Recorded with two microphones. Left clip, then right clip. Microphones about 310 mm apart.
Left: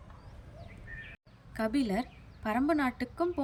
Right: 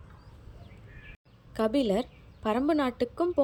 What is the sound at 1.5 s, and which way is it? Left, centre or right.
A woman's voice, centre.